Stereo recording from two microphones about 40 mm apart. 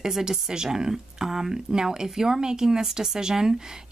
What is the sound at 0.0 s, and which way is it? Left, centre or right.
Speech, centre.